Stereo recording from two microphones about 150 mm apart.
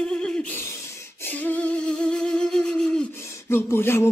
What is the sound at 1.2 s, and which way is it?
Humming, 10° left (ahead or behind).